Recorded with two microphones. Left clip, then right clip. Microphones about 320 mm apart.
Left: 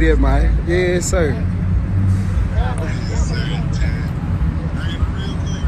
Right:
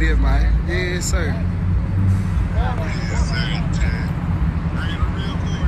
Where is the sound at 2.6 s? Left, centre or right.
Centre.